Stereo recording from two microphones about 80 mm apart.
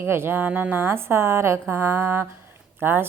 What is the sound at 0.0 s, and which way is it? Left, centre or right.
Speech, right.